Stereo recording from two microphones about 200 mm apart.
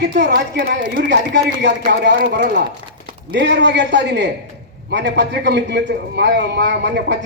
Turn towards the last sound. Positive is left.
turn(degrees=-60)  # may be behind; listen again after turning